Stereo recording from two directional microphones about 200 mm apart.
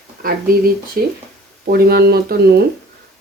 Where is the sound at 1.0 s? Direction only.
45° right (ahead or behind).